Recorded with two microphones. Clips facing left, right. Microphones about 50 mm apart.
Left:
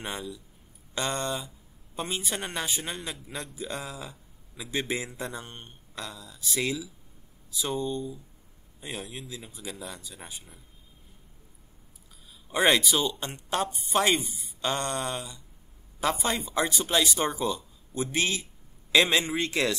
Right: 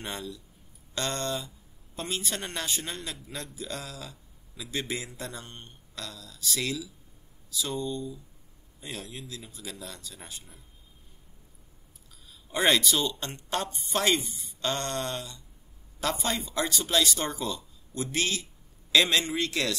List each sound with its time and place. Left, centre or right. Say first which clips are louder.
0.0 s a man's voice: left 1 dB; centre
12.4 s speech: left 1 dB; centre